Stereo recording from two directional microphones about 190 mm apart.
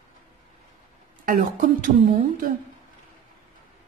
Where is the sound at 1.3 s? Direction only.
50° right (ahead or behind).